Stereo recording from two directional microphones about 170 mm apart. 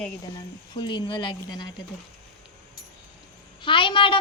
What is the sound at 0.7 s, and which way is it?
Child singing, 25° left (ahead or behind).